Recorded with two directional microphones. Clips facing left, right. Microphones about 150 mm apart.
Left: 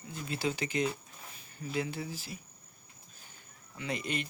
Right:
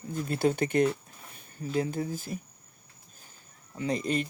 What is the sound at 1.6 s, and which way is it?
Speech, 40° right (ahead or behind).